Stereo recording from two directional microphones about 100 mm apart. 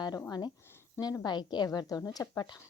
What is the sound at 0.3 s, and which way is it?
A woman's voice, 45° left (ahead or behind).